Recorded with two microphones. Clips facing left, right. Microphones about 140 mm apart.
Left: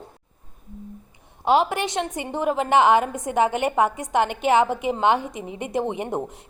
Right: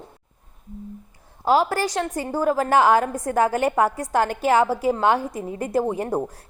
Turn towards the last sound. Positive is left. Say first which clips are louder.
# right 2 dB
turn(degrees=0)  # may be behind; listen again after turning